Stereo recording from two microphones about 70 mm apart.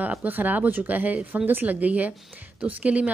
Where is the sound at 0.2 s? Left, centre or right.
Right.